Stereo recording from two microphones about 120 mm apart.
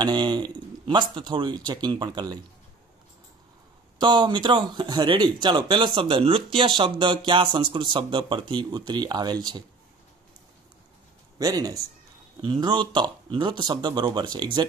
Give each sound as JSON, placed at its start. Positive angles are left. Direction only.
{"t": 0.0, "sound": "speech", "side_deg": -35}
{"t": 4.0, "sound": "speech", "side_deg": -40}
{"t": 11.3, "sound": "speech", "side_deg": -30}